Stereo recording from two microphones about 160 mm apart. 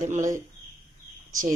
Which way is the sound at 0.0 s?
50° right (ahead or behind).